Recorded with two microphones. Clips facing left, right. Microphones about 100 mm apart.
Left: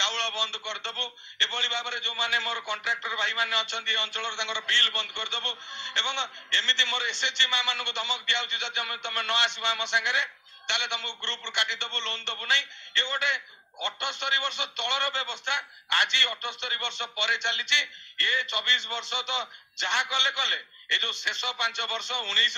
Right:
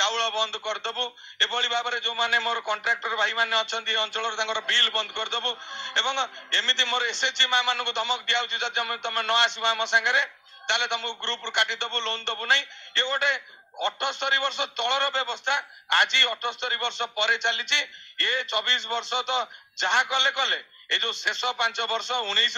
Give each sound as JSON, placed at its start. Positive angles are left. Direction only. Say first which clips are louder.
{"t": 0.0, "sound": "a man's voice", "louder": "right 5 dB", "side_deg": -30}